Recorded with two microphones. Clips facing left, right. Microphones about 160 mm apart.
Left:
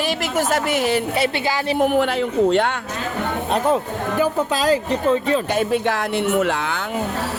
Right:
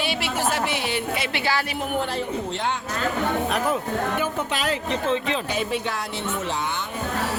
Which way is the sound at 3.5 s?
35° left (ahead or behind).